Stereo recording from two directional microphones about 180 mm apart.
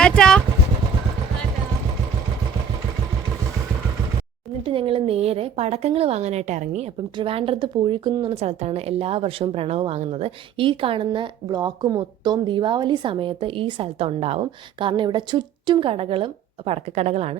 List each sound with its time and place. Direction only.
0.0 s vehicle: 5° left (ahead or behind)
4.6 s speech: 30° right (ahead or behind)